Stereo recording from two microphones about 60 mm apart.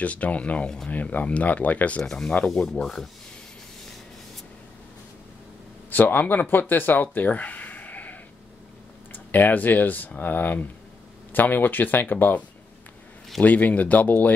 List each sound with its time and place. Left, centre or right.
0.0 s speech: left
2.0 s speech: centre
5.9 s speech: left
6.7 s a sound: left
9.1 s speech: left